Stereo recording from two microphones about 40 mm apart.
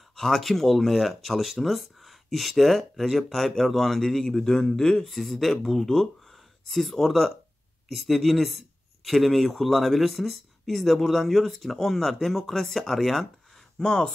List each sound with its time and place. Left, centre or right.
0.1 s speech: centre
5.1 s speech: centre
13.7 s speech: centre